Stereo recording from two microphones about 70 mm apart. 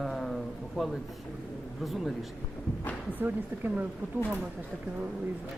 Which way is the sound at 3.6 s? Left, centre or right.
Right.